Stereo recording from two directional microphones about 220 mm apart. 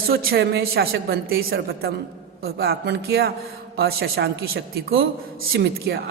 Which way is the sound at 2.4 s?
45° right (ahead or behind).